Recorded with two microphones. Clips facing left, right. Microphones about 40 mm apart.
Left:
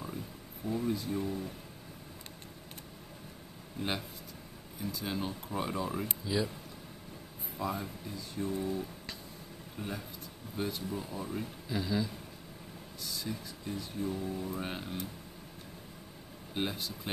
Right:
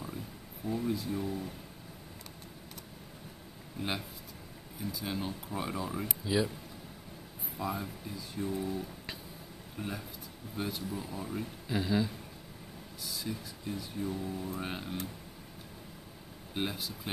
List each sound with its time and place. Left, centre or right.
0.7 s speech: centre
3.8 s speech: centre
6.2 s a sound: centre
7.5 s speech: centre
11.7 s a sound: centre
13.0 s speech: centre
16.5 s speech: centre